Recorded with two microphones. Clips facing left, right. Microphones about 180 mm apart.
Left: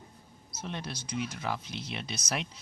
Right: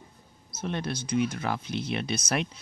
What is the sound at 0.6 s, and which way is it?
Speech, 60° right (ahead or behind).